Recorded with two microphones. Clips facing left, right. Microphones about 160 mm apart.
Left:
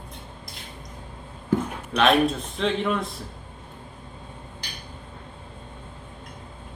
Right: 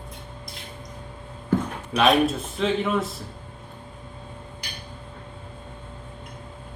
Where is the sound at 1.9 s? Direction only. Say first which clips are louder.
Even; centre (ahead or behind).